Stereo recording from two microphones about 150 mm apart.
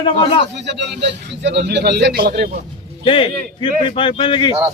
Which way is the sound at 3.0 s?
35° left (ahead or behind).